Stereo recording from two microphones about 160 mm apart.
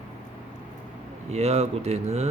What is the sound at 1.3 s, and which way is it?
Speech, 40° right (ahead or behind).